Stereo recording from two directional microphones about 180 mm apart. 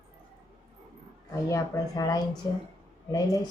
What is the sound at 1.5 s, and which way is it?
Speech, 20° left (ahead or behind).